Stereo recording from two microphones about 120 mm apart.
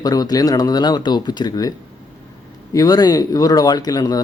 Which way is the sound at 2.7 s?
30° left (ahead or behind).